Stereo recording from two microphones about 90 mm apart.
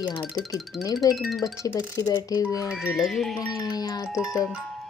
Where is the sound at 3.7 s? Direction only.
50° left (ahead or behind).